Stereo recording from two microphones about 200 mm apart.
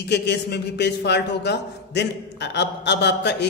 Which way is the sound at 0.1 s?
55° left (ahead or behind).